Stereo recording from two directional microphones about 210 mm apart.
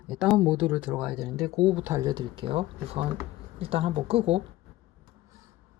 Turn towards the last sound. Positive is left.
turn(degrees=-30)  # may be behind; listen again after turning